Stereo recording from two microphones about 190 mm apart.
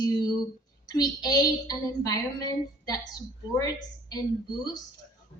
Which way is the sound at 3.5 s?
20° left (ahead or behind).